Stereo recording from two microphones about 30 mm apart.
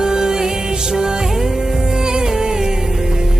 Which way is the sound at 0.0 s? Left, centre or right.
Right.